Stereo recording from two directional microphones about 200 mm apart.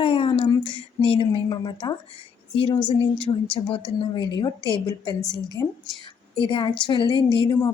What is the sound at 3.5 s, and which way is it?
A woman's voice, 25° left (ahead or behind).